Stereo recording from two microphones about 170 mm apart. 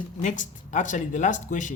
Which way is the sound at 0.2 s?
45° left (ahead or behind).